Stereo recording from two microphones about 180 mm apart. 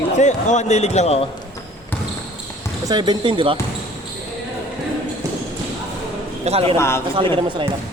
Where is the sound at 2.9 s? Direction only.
25° right (ahead or behind).